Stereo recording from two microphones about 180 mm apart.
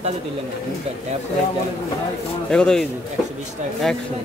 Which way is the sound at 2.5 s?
5° left (ahead or behind).